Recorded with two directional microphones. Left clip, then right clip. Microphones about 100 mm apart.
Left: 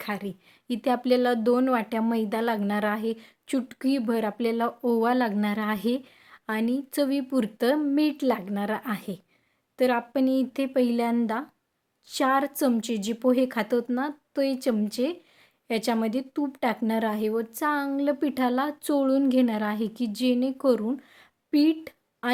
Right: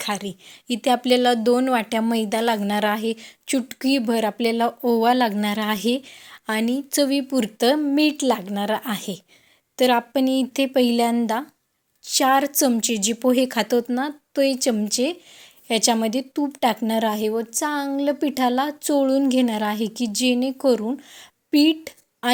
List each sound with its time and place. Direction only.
0.0 s a woman's voice: 15° right (ahead or behind)
11.1 s a woman's voice: 20° right (ahead or behind)
21.5 s a sound: 20° right (ahead or behind)